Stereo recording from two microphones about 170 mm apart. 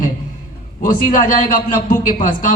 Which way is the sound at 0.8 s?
50° left (ahead or behind).